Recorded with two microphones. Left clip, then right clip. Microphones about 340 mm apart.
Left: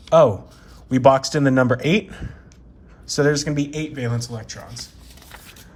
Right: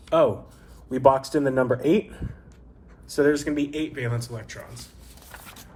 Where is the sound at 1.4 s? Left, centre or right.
Right.